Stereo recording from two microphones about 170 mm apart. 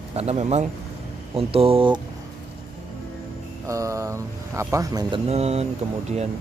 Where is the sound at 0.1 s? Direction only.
35° right (ahead or behind).